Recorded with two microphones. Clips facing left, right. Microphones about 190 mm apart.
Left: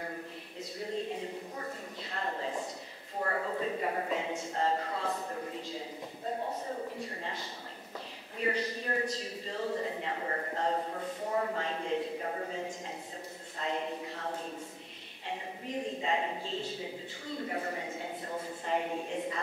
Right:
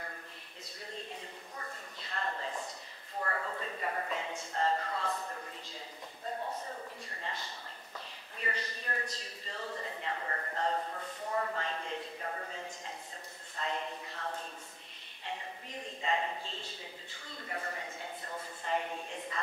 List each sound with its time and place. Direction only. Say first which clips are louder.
1.2 s a sound: left 8 dB; 10° left (ahead or behind)
3.2 s a man's voice: left 4 dB; 15° left (ahead or behind)
7.1 s a man's voice: left 3 dB; 10° left (ahead or behind)